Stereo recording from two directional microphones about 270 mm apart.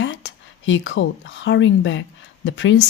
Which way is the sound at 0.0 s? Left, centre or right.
Left.